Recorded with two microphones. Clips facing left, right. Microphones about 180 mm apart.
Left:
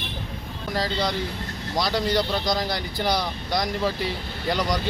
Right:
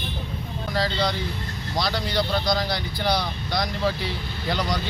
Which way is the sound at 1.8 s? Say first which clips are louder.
Left 2 dB; 40° left (ahead or behind).